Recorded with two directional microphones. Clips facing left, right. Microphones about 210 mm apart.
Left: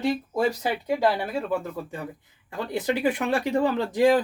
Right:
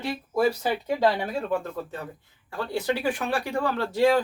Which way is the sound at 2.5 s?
20° left (ahead or behind).